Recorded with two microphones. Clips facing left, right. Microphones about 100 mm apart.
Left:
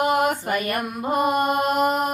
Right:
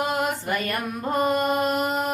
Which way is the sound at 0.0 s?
55° left (ahead or behind).